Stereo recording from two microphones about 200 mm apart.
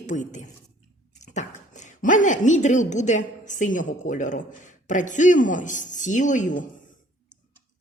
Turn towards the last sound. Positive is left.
turn(degrees=40)  # may be behind; listen again after turning